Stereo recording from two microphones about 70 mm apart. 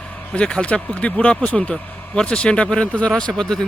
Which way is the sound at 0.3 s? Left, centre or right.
Centre.